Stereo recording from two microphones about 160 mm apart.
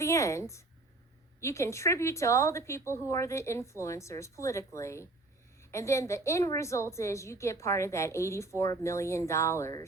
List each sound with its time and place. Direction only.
0.0 s a woman's voice: 20° left (ahead or behind)